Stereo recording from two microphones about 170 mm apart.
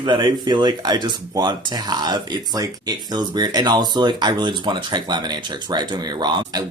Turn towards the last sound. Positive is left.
turn(degrees=-25)  # may be behind; listen again after turning